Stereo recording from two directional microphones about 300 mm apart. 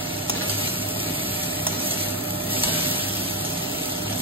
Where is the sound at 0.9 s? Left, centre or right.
Centre.